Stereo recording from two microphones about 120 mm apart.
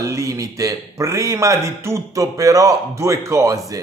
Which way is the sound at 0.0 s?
25° right (ahead or behind).